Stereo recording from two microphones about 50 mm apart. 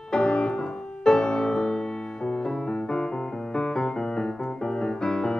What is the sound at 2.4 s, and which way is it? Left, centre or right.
Piano, centre.